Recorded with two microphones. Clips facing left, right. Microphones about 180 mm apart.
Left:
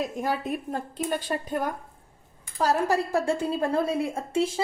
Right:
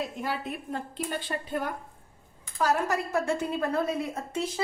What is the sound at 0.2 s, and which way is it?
A woman's voice, 40° left (ahead or behind).